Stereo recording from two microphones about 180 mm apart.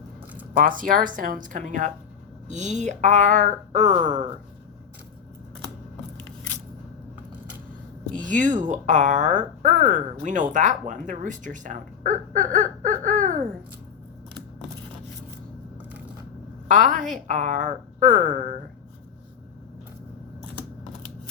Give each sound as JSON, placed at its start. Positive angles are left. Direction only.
{"t": 0.5, "sound": "speech", "side_deg": -50}
{"t": 8.1, "sound": "speech", "side_deg": -45}
{"t": 16.6, "sound": "speech", "side_deg": -45}